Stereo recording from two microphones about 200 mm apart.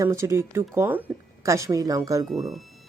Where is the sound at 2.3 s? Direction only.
Centre (ahead or behind).